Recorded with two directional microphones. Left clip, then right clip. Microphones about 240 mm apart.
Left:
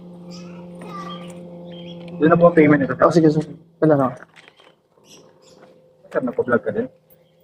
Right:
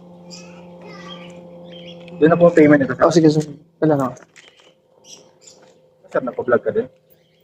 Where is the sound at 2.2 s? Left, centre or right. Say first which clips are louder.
Right 2 dB; right.